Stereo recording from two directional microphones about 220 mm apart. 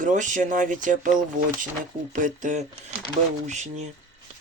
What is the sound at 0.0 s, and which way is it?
Speech, 35° right (ahead or behind).